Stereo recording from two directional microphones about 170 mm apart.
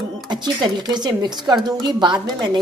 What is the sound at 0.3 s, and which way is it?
A woman's voice, 25° right (ahead or behind).